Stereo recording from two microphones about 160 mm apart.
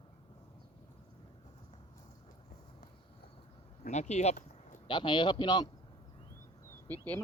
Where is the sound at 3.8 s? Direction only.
45° left (ahead or behind).